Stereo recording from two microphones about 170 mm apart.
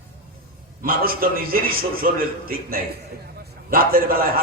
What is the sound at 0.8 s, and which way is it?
Music, 60° right (ahead or behind).